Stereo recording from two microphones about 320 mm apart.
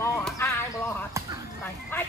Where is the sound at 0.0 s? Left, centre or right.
Centre.